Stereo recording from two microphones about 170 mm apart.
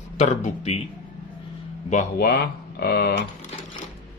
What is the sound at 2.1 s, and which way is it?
Speech, 65° left (ahead or behind).